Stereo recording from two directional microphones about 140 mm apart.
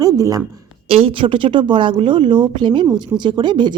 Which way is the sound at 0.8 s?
45° right (ahead or behind).